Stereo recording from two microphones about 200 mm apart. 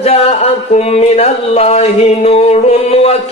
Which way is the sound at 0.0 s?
30° left (ahead or behind).